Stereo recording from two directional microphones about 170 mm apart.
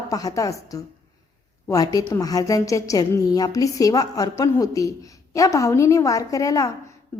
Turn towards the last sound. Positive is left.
turn(degrees=20)  # may be behind; listen again after turning